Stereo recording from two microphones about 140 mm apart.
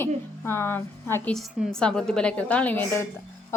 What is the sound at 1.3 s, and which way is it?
A woman's voice, 5° left (ahead or behind).